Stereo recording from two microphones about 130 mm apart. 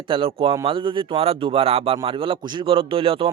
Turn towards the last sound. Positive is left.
turn(degrees=-45)  # may be behind; listen again after turning